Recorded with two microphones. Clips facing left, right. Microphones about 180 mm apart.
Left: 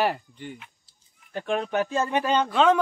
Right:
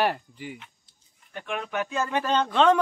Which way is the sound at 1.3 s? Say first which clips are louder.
Left 5 dB; 35° left (ahead or behind).